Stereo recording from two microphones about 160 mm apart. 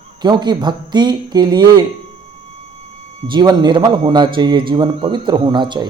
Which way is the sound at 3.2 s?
30° right (ahead or behind).